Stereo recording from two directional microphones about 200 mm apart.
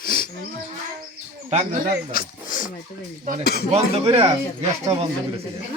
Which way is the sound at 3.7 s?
30° right (ahead or behind).